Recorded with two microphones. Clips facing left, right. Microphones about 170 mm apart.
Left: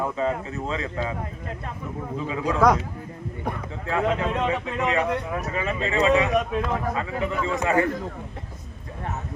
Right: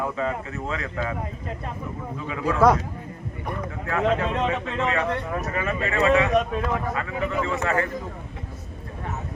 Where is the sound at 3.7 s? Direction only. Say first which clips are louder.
Right 1 dB; 15° left (ahead or behind).